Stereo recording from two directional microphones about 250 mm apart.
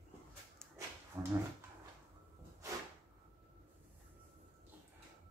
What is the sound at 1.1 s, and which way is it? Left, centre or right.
Dog, centre.